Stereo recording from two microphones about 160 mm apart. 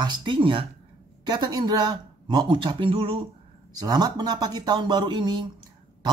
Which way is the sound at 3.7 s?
25° right (ahead or behind).